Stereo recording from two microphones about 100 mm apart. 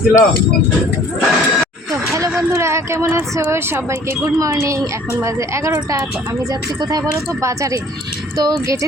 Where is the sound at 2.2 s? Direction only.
35° right (ahead or behind).